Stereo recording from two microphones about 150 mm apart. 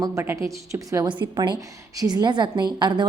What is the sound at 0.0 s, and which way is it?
A woman's voice, 20° right (ahead or behind).